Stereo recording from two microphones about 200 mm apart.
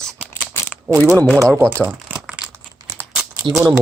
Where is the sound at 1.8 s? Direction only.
5° right (ahead or behind).